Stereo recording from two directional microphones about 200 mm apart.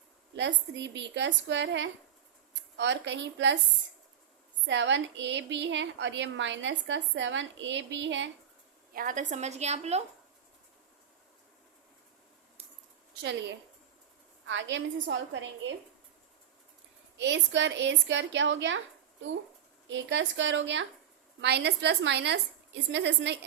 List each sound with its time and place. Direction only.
0.3 s a woman's voice: 65° right (ahead or behind)
4.6 s a woman's voice: 65° right (ahead or behind)
8.9 s a woman's voice: 45° right (ahead or behind)
14.4 s a woman's voice: 65° right (ahead or behind)
17.2 s a woman's voice: 65° right (ahead or behind)
19.9 s a woman's voice: 65° right (ahead or behind)